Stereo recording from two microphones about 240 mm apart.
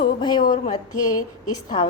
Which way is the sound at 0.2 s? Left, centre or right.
Centre.